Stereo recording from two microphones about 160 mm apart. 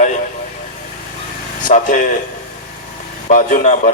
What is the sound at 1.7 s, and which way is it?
Speech, 55° left (ahead or behind).